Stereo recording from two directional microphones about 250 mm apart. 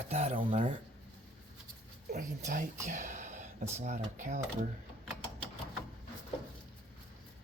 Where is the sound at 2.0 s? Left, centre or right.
Right.